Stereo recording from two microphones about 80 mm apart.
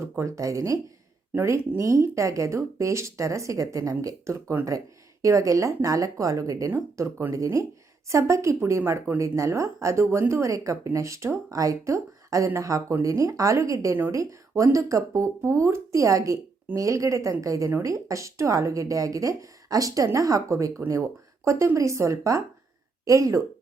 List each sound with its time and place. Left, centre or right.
0.0 s a woman's voice: right
6.7 s a woman's voice: right